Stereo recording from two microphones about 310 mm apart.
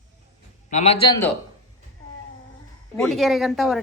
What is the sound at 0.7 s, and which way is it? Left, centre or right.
Speech, centre.